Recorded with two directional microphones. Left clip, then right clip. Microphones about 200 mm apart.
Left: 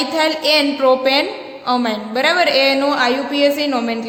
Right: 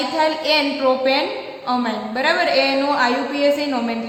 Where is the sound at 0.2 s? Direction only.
50° left (ahead or behind).